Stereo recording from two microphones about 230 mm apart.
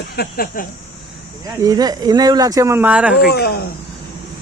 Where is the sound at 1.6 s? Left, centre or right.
Centre.